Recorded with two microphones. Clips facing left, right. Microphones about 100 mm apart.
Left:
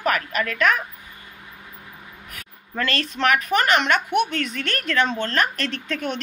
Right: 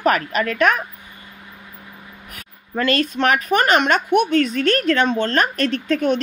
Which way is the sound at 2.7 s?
20° right (ahead or behind).